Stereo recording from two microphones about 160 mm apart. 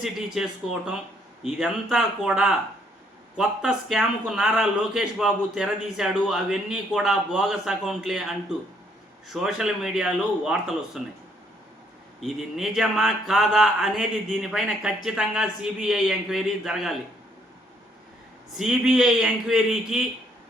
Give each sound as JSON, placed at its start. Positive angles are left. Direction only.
{"t": 0.0, "sound": "a man's voice", "side_deg": 0}
{"t": 9.3, "sound": "a man's voice", "side_deg": 0}
{"t": 12.2, "sound": "a man's voice", "side_deg": 0}
{"t": 18.5, "sound": "a man's voice", "side_deg": -5}